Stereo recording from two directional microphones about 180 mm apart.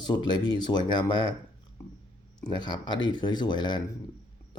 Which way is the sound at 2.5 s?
25° left (ahead or behind).